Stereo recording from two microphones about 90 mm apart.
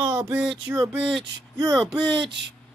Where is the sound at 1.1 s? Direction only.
50° right (ahead or behind).